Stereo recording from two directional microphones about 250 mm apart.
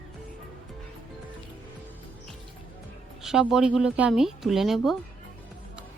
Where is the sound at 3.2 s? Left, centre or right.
Centre.